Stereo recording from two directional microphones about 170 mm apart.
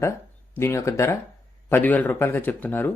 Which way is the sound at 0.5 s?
15° left (ahead or behind).